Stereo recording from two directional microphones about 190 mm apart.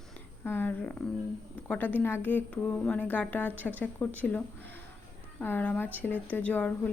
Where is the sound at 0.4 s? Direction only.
10° left (ahead or behind).